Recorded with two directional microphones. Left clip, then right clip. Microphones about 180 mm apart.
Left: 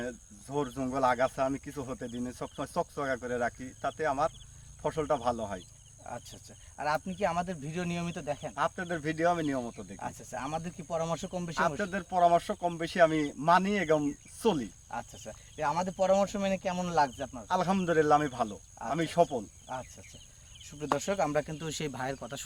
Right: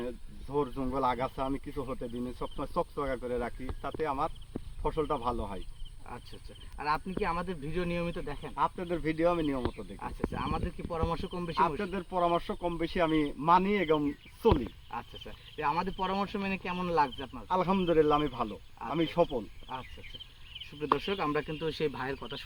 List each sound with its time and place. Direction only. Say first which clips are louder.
0.5 s speech: right 1 dB; 15° left (ahead or behind)
6.7 s speech: even; 40° left (ahead or behind)
8.5 s speech: right 3 dB; 15° left (ahead or behind)
10.0 s speech: right 2 dB; 40° left (ahead or behind)
11.8 s speech: left 4 dB; 20° left (ahead or behind)
15.2 s speech: even; 40° left (ahead or behind)
17.5 s speech: right 1 dB; 15° left (ahead or behind)
21.0 s speech: left 2 dB; 40° left (ahead or behind)